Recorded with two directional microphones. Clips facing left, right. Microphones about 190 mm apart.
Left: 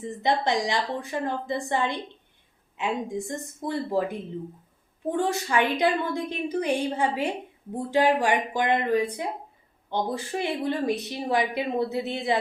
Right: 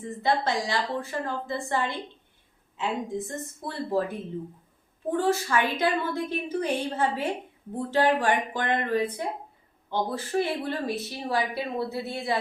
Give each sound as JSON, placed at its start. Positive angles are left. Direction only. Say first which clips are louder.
{"t": 0.0, "sound": "a woman's voice", "louder": "left 1 dB", "side_deg": 20}
{"t": 5.1, "sound": "a woman's voice", "louder": "right 1 dB", "side_deg": 15}